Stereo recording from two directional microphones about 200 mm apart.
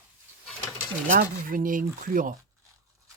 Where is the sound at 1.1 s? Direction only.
45° right (ahead or behind).